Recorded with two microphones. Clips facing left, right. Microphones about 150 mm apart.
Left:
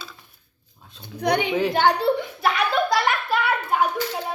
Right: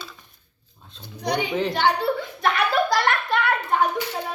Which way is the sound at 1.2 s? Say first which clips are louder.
Left 3 dB; 60° left (ahead or behind).